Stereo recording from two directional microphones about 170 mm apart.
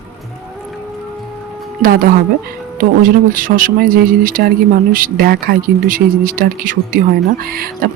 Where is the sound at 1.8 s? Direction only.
55° right (ahead or behind).